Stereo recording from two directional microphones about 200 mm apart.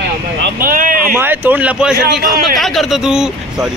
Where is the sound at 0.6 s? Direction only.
45° right (ahead or behind).